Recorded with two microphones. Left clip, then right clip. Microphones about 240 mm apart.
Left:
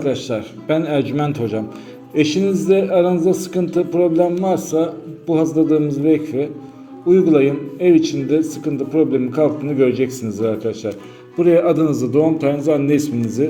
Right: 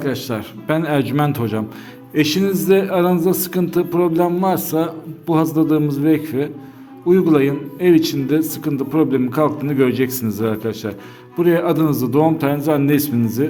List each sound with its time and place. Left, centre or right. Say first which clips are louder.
0.0 s a man's voice: left 2 dB; right